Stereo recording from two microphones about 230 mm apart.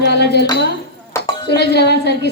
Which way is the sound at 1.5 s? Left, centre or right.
Left.